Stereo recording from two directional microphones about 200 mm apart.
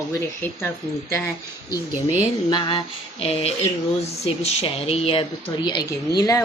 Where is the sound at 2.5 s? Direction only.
25° left (ahead or behind).